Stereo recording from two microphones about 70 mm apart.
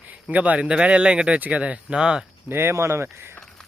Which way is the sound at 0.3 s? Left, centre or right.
Right.